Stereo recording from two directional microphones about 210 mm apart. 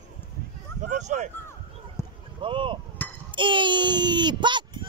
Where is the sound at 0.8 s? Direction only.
35° right (ahead or behind).